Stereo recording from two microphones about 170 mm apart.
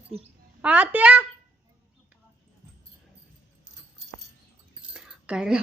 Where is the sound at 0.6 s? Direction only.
10° right (ahead or behind).